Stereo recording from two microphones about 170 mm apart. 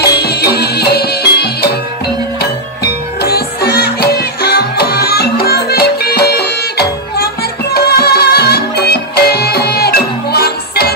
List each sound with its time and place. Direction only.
0.0 s music: 70° left (ahead or behind)
2.8 s music: 65° left (ahead or behind)